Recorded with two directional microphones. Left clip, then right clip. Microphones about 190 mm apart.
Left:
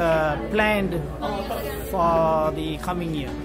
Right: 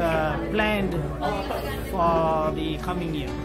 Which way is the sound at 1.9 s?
35° left (ahead or behind).